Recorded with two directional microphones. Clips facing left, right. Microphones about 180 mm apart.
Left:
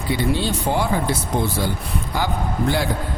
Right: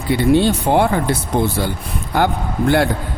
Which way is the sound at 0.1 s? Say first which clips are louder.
Right 8 dB; 60° right (ahead or behind).